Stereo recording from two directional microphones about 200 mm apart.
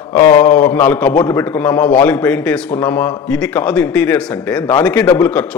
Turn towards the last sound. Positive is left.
turn(degrees=5)  # may be behind; listen again after turning